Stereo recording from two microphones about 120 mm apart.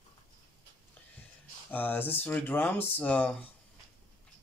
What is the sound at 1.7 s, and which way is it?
Speech, 15° left (ahead or behind).